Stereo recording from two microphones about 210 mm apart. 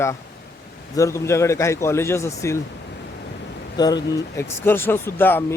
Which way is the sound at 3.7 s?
20° left (ahead or behind).